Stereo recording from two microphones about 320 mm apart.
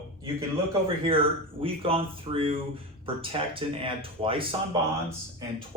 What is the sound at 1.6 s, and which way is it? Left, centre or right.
Speech, centre.